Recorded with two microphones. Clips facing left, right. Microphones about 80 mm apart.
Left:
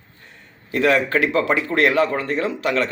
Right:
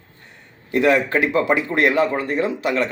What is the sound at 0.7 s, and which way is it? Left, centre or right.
A man's voice, centre.